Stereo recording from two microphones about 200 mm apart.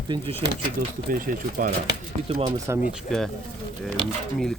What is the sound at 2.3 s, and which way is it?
Speech, 30° right (ahead or behind).